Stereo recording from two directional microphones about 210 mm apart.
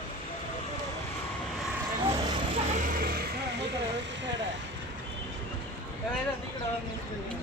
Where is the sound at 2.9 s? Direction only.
45° right (ahead or behind).